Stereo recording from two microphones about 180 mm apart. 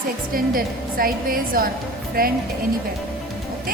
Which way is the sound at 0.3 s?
55° right (ahead or behind).